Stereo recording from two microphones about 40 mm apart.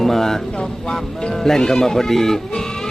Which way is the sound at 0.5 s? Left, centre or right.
Left.